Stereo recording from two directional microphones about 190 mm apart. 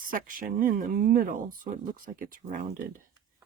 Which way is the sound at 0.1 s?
50° right (ahead or behind).